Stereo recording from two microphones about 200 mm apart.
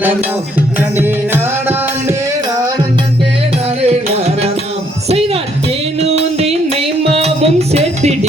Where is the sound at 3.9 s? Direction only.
30° right (ahead or behind).